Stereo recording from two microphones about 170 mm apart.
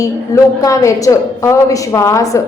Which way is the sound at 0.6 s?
20° left (ahead or behind).